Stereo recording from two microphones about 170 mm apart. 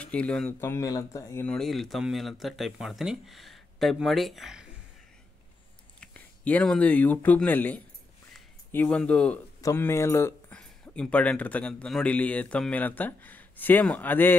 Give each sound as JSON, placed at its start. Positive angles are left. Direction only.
{"t": 0.0, "sound": "speech", "side_deg": 5}
{"t": 1.5, "sound": "speech", "side_deg": 0}
{"t": 5.9, "sound": "speech", "side_deg": 10}
{"t": 8.3, "sound": "a sound", "side_deg": 5}
{"t": 9.6, "sound": "speech", "side_deg": 15}